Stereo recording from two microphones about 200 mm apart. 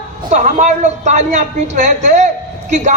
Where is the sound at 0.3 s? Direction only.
40° right (ahead or behind).